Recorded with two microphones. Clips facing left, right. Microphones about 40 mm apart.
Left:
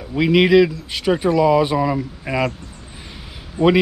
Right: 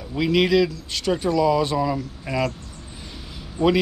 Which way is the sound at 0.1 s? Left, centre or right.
Centre.